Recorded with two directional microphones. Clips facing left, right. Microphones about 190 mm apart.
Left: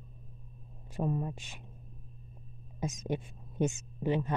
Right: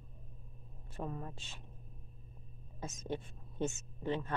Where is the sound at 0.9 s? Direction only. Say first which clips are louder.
Left 9 dB; 15° left (ahead or behind).